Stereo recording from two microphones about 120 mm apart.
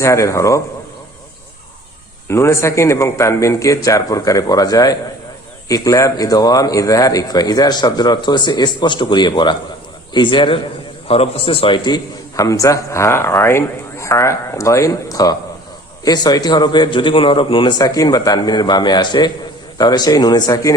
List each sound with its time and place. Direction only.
0.0 s speech: 25° left (ahead or behind)
2.2 s a man's voice: 20° left (ahead or behind); by 11.9 s 40° left (ahead or behind)
12.4 s a man's voice: 30° left (ahead or behind)